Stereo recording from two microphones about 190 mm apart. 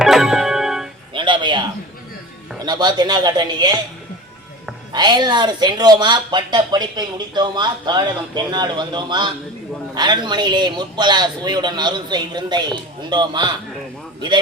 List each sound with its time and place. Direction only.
0.0 s keyboard: centre (ahead or behind)
1.1 s music: 25° right (ahead or behind)
2.6 s speech: 20° right (ahead or behind)
4.9 s speech: 20° right (ahead or behind)